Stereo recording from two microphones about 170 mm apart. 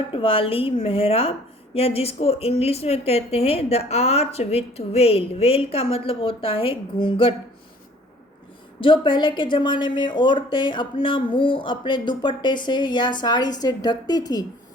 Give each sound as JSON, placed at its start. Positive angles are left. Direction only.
{"t": 0.1, "sound": "a woman's voice", "side_deg": 30}
{"t": 8.8, "sound": "a woman's voice", "side_deg": 30}